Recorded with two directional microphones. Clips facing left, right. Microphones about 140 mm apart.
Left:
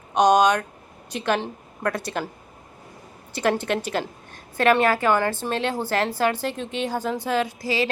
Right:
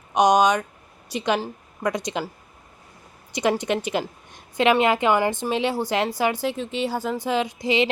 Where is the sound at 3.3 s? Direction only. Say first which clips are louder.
Right 1 dB; 15° right (ahead or behind).